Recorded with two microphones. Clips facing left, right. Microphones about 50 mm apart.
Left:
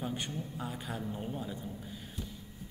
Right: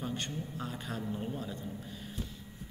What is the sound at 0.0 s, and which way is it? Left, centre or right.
Speech, centre.